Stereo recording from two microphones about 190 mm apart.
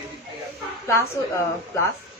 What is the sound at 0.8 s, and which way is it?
Speech, 15° left (ahead or behind).